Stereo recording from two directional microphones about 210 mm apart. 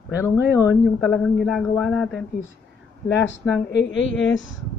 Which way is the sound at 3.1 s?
60° left (ahead or behind).